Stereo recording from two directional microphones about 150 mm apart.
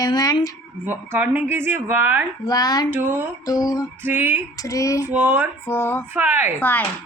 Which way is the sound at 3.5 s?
25° left (ahead or behind).